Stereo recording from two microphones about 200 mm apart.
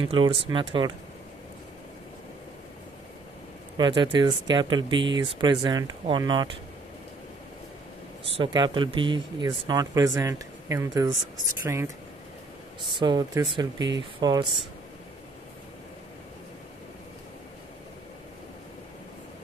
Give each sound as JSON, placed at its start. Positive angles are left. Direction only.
{"t": 0.0, "sound": "speech", "side_deg": -25}
{"t": 3.7, "sound": "speech", "side_deg": -25}
{"t": 8.4, "sound": "speech", "side_deg": -25}
{"t": 12.9, "sound": "speech", "side_deg": -20}